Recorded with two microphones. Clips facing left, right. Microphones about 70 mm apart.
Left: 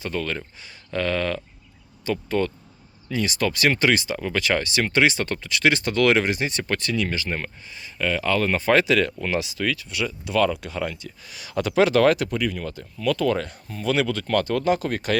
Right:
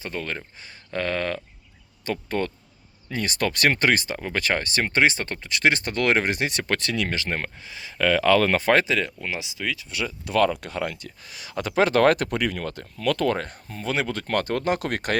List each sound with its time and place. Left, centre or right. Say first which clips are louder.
0.0 s speech: left 3 dB; right
6.2 s speech: even; right
7.6 s speech: right 3 dB; right
8.7 s speech: left 5 dB; right
9.2 s speech: left 5 dB; centre
9.9 s speech: left 1 dB; right
11.3 s speech: left 4 dB; right
12.0 s speech: even; right
13.3 s speech: left 2 dB; right